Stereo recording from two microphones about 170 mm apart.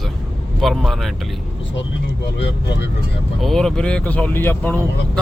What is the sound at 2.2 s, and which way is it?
Speech, 90° left.